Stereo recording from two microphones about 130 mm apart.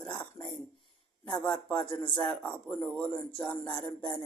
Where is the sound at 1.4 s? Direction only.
10° left (ahead or behind).